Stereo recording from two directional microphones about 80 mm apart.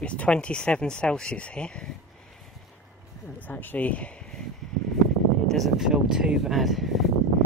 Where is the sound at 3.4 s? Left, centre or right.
Left.